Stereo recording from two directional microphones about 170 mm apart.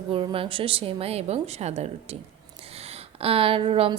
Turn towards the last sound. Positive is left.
turn(degrees=-35)  # may be behind; listen again after turning